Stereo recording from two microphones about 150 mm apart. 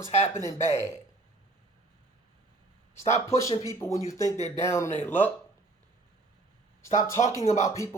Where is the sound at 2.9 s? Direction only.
20° left (ahead or behind).